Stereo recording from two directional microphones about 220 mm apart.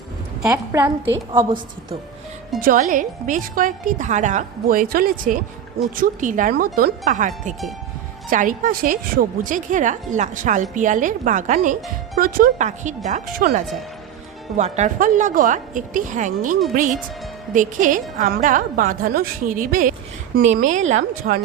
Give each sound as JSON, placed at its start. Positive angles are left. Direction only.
{"t": 0.4, "sound": "a woman's voice", "side_deg": -15}
{"t": 2.6, "sound": "a woman's voice", "side_deg": -40}